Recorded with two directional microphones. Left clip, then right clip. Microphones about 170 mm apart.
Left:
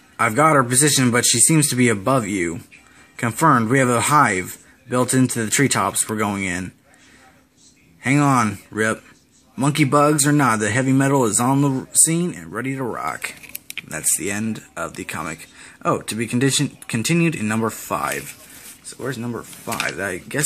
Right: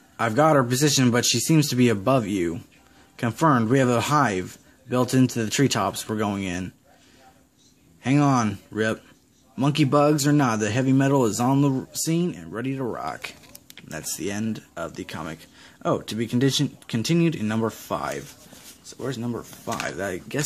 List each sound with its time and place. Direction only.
0.2 s a man's voice: 5° right (ahead or behind)
8.0 s a man's voice: centre (ahead or behind)
13.5 s a sound: 20° right (ahead or behind)
15.0 s a man's voice: centre (ahead or behind)